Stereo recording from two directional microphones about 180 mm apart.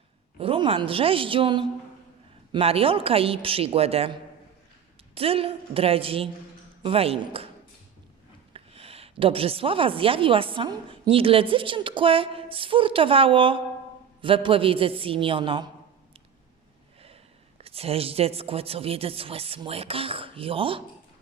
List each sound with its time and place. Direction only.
0.3 s a woman's voice: 30° right (ahead or behind)
8.5 s a woman's voice: 30° right (ahead or behind)
17.6 s speech: 35° right (ahead or behind)